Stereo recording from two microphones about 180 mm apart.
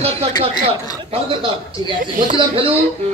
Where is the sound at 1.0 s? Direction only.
30° right (ahead or behind).